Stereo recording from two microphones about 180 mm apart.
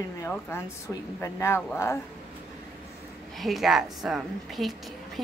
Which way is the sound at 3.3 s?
Centre (ahead or behind).